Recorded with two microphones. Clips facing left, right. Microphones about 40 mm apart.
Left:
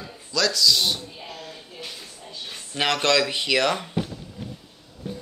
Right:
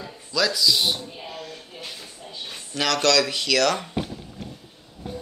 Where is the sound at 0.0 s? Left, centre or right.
Centre.